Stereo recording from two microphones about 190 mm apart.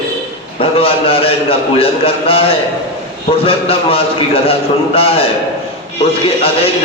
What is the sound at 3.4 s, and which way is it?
A man's voice, 30° left (ahead or behind).